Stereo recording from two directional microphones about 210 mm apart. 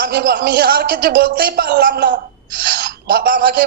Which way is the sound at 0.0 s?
45° right (ahead or behind).